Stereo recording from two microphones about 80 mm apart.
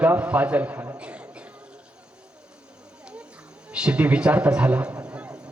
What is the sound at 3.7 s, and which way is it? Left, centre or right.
A man's voice, centre.